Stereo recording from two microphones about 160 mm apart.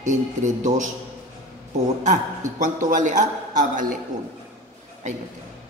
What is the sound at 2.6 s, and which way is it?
A woman's voice, 50° right (ahead or behind).